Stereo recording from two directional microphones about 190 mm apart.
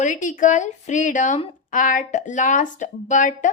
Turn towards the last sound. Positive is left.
turn(degrees=40)  # may be behind; listen again after turning